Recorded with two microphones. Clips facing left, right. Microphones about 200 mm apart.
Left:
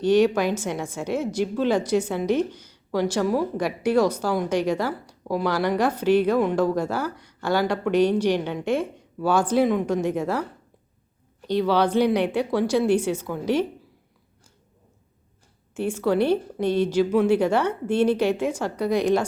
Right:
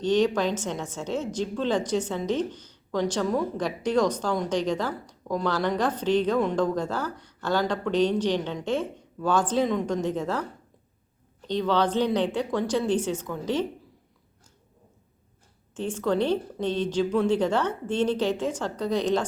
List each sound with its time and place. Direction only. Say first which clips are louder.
0.0 s a woman's voice: left 4 dB; 10° left (ahead or behind)
11.4 s a woman's voice: left 3 dB; 10° left (ahead or behind)
15.7 s a woman's voice: left 3 dB; 10° left (ahead or behind)